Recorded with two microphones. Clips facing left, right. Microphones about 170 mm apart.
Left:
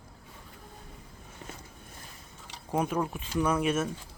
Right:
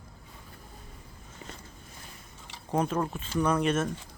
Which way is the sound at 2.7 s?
10° left (ahead or behind).